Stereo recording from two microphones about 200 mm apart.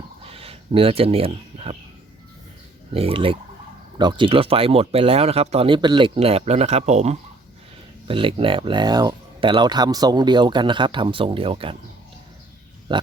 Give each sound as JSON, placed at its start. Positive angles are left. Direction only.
{"t": 0.3, "sound": "speech", "side_deg": -30}
{"t": 2.9, "sound": "speech", "side_deg": -30}
{"t": 12.9, "sound": "speech", "side_deg": -25}